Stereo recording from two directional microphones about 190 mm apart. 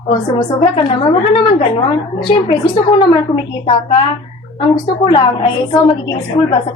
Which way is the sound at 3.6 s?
30° left (ahead or behind).